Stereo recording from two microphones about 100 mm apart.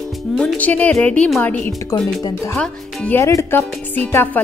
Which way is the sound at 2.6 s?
10° left (ahead or behind).